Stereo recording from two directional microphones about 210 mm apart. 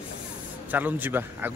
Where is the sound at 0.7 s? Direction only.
10° right (ahead or behind).